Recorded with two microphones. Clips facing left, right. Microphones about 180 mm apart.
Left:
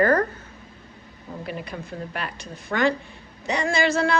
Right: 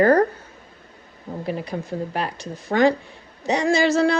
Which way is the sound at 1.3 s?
65° right (ahead or behind).